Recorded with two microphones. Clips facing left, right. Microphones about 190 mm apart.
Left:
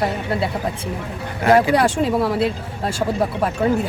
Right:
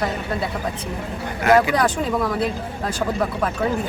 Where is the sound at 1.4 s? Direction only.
30° left (ahead or behind).